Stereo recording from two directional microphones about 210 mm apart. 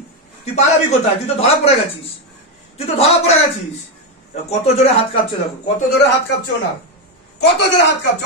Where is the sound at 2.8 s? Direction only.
30° left (ahead or behind).